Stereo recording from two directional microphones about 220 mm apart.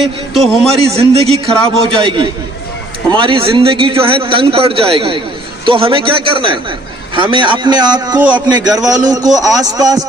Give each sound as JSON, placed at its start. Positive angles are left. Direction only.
{"t": 0.3, "sound": "a man's voice", "side_deg": 0}
{"t": 0.9, "sound": "a man's voice", "side_deg": -25}